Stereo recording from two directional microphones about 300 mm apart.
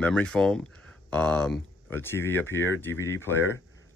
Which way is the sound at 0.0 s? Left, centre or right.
Centre.